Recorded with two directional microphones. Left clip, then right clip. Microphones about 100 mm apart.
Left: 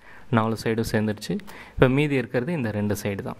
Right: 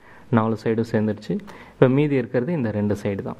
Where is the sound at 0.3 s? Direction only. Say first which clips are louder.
Right 2 dB; 15° left (ahead or behind).